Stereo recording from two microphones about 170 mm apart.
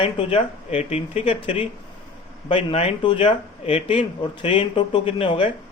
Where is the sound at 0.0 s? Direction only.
30° left (ahead or behind).